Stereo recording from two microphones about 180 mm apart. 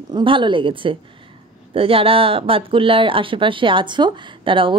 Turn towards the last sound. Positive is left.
turn(degrees=-30)  # may be behind; listen again after turning